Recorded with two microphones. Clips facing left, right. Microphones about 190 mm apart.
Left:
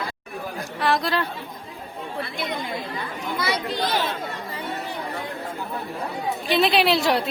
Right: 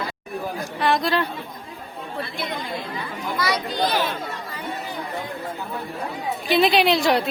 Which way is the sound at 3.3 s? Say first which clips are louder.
Right 1 dB; 25° left (ahead or behind).